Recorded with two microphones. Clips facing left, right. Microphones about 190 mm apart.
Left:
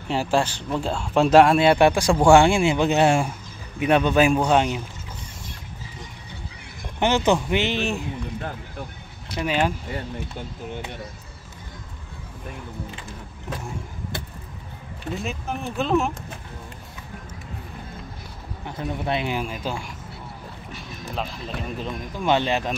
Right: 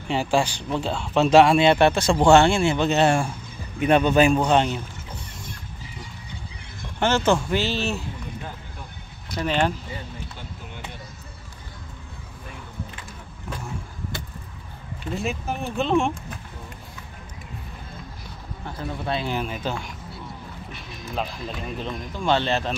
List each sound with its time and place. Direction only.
0.1 s speech: 5° left (ahead or behind)
3.8 s speech: centre (ahead or behind)
7.0 s speech: 15° left (ahead or behind)
9.3 s speech: 5° left (ahead or behind)
15.1 s speech: centre (ahead or behind)
18.7 s speech: 20° left (ahead or behind)
19.3 s speech: 5° left (ahead or behind)
21.1 s speech: centre (ahead or behind)
22.2 s speech: 15° left (ahead or behind)